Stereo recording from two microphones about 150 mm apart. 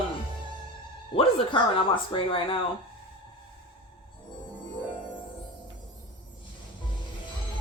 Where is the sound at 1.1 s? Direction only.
35° left (ahead or behind).